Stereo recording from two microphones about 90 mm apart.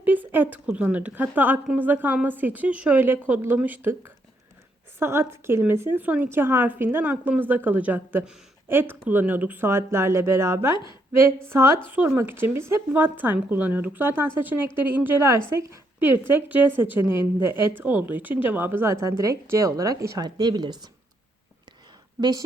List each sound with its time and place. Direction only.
0.0 s a woman's voice: 20° right (ahead or behind)
4.9 s a woman's voice: 30° right (ahead or behind)
11.9 s speech: 20° right (ahead or behind); by 20.7 s 50° right (ahead or behind)
22.2 s a woman's voice: 45° right (ahead or behind)